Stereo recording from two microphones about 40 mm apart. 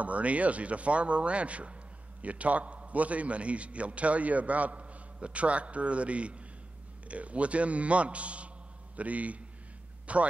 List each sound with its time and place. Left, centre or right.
0.0 s a man's voice: right